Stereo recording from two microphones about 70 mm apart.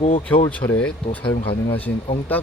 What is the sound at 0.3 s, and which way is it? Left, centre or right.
Speech, centre.